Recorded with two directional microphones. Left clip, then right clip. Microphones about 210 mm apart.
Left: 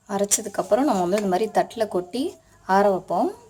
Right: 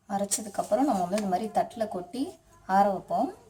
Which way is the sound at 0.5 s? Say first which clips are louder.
Left 4 dB; 45° left (ahead or behind).